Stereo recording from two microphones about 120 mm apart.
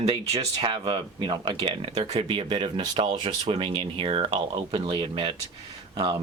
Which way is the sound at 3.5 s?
50° right (ahead or behind).